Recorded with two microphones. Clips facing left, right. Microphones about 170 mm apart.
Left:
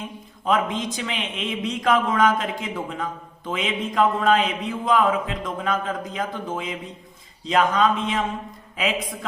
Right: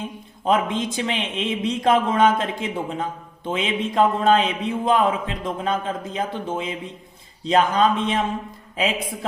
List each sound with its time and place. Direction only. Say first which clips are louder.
0.4 s a man's voice: right 2 dB; 30° right (ahead or behind)